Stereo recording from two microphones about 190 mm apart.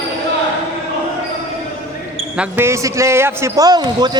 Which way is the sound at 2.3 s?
10° right (ahead or behind).